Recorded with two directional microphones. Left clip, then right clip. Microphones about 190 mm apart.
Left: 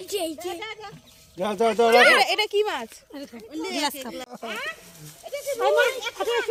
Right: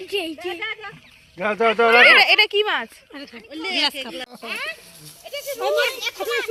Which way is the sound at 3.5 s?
80° left.